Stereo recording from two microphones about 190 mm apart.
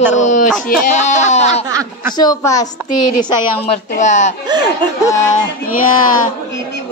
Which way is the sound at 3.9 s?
40° left (ahead or behind).